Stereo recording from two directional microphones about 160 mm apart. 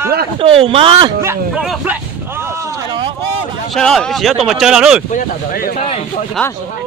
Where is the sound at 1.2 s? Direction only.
15° right (ahead or behind).